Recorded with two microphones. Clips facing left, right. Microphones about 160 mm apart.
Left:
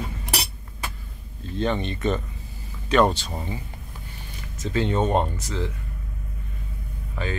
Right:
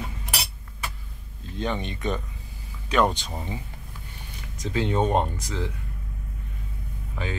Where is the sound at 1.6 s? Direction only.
15° right (ahead or behind).